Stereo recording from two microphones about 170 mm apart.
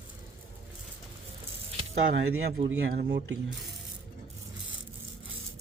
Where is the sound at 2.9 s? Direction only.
80° right.